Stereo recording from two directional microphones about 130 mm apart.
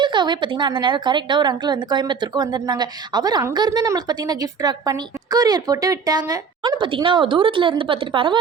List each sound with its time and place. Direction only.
0.0 s a woman's voice: 35° right (ahead or behind)
6.7 s a woman's voice: 40° right (ahead or behind)